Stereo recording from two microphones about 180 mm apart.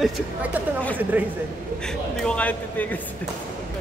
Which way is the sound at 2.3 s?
10° left (ahead or behind).